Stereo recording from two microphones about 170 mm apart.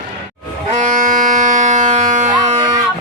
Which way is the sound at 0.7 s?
45° right (ahead or behind).